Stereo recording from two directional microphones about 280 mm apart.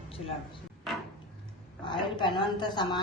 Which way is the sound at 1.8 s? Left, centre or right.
Centre.